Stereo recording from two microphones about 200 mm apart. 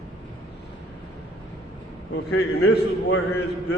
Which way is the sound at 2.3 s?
55° left (ahead or behind).